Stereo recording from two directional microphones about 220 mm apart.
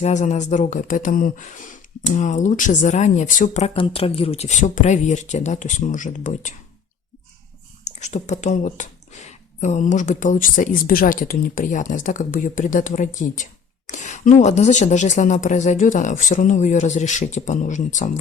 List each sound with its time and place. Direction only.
0.0 s speech: 30° left (ahead or behind)
7.9 s speech: 30° left (ahead or behind)